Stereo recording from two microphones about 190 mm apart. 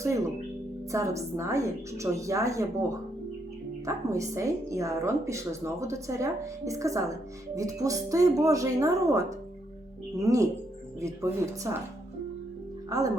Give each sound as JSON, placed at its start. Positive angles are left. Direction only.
{"t": 0.9, "sound": "a woman's voice", "side_deg": -15}
{"t": 12.9, "sound": "a woman's voice", "side_deg": -20}